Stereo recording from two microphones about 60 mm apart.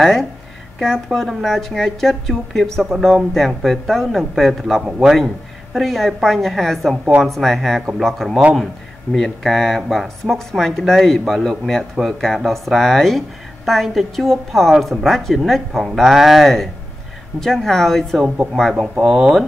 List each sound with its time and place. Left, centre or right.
0.0 s speech: centre
4.8 s speech: centre
5.1 s speech: centre
18.2 s speech: centre
19.0 s speech: centre